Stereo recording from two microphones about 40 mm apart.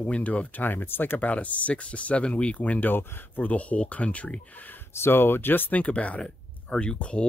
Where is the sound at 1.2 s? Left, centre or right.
Left.